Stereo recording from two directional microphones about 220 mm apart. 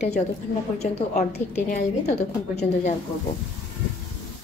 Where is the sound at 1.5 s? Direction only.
30° left (ahead or behind).